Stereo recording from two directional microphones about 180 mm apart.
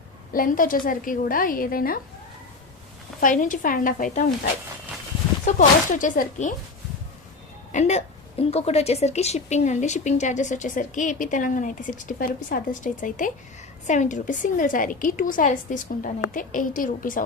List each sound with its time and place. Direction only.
0.3 s a woman's voice: 50° left (ahead or behind)
3.2 s a woman's voice: 50° left (ahead or behind)
5.5 s a woman's voice: 45° left (ahead or behind)
7.7 s a woman's voice: 40° left (ahead or behind)